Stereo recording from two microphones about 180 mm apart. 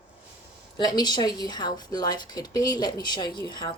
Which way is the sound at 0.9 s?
25° left (ahead or behind).